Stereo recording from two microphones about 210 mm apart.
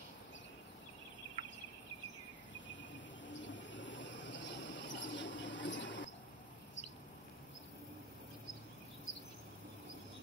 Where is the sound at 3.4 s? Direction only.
60° left (ahead or behind).